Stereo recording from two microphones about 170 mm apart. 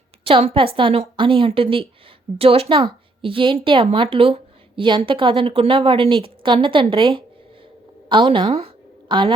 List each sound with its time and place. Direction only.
0.3 s a woman's voice: 35° right (ahead or behind)